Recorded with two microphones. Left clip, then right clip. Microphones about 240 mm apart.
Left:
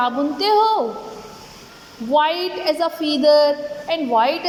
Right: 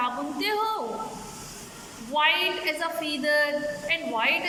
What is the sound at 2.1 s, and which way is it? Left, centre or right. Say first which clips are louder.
A woman's voice: left 5 dB; left.